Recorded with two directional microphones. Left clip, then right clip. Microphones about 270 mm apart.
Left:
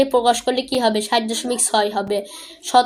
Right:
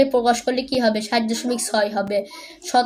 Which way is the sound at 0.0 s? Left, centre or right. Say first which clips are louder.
Left 1 dB; centre.